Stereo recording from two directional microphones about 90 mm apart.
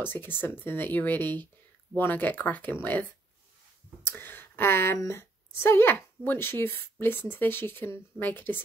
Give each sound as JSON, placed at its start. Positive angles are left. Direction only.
{"t": 0.0, "sound": "a woman's voice", "side_deg": 20}